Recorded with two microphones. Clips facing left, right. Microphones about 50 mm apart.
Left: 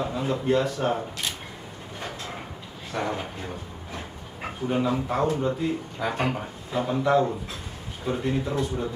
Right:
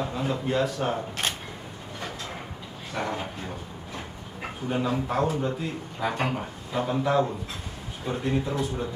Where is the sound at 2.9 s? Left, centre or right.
Centre.